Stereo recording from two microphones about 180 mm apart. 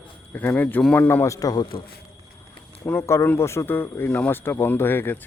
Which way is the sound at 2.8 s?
15° left (ahead or behind).